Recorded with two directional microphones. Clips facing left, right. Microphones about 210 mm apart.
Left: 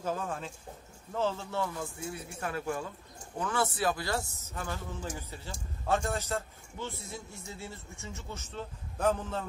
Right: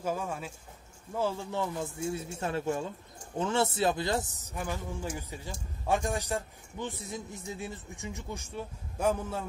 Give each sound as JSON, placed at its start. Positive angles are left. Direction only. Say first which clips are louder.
{"t": 0.0, "sound": "a man's voice", "louder": "right 1 dB", "side_deg": -10}